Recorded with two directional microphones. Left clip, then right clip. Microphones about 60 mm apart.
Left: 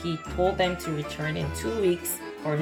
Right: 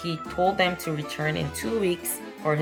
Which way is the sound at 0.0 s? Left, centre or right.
Right.